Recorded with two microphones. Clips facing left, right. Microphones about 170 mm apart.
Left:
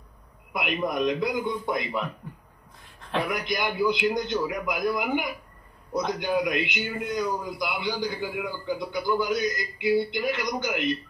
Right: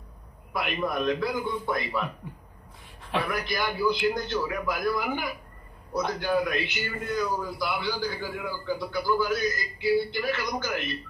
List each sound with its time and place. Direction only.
0.5 s a man's voice: 15° left (ahead or behind)
3.3 s a man's voice: 20° left (ahead or behind)